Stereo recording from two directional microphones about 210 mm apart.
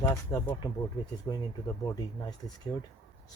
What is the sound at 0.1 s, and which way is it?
Speech, 15° left (ahead or behind).